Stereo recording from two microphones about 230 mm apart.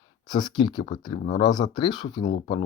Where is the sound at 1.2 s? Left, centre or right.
Left.